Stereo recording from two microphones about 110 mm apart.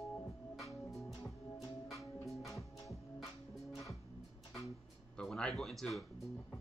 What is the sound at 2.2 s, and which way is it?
Music, centre (ahead or behind).